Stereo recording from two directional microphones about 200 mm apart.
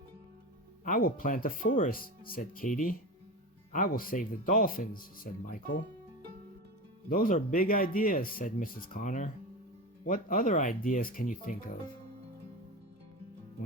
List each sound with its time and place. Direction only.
0.9 s speech: 45° left (ahead or behind)
7.1 s speech: 40° left (ahead or behind)